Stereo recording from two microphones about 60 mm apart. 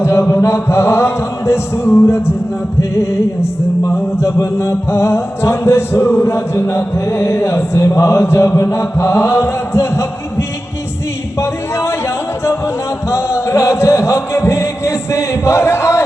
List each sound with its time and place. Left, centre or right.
0.0 s chant: left
0.4 s music: left
4.2 s music: left
11.3 s speech: left